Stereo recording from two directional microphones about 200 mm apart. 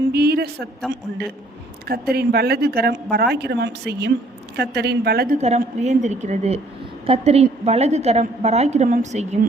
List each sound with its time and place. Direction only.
0.1 s a man's voice: 50° right (ahead or behind)
1.9 s speech: 50° right (ahead or behind)
5.4 s a woman's voice: 35° right (ahead or behind)